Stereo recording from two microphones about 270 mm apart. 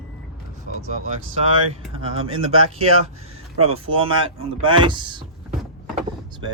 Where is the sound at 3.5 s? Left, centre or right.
Right.